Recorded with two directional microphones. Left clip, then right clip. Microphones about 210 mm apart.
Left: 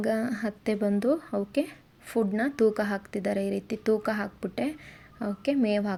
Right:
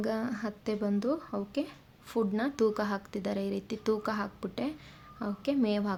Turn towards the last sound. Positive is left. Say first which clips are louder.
# left 4 dB
turn(degrees=15)  # may be behind; listen again after turning